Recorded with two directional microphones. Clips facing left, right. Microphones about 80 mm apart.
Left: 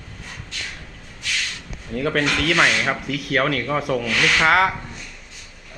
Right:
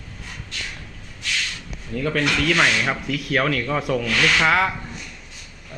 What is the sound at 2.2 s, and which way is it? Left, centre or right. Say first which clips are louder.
Speech: left 1 dB; left.